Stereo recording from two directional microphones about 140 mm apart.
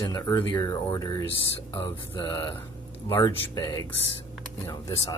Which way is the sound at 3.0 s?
20° left (ahead or behind).